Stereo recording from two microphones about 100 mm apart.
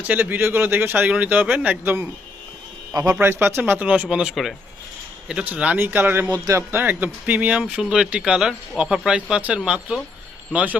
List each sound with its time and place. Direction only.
0.0 s speech: 15° right (ahead or behind)
2.9 s a man's voice: 35° right (ahead or behind)
3.2 s speech: 20° right (ahead or behind)
6.2 s speech: 40° right (ahead or behind)
6.6 s speech: 20° right (ahead or behind)